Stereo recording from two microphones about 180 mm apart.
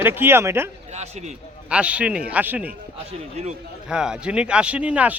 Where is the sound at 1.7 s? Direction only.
5° right (ahead or behind).